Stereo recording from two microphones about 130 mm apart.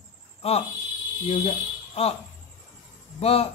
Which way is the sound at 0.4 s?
50° left (ahead or behind).